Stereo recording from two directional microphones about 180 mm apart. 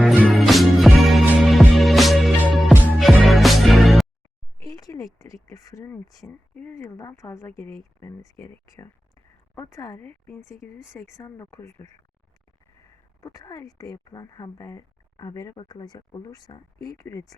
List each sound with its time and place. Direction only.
0.0 s music: 5° right (ahead or behind)
4.6 s a sound: 20° left (ahead or behind)
6.1 s speech: 5° left (ahead or behind)
13.2 s speech: 20° left (ahead or behind)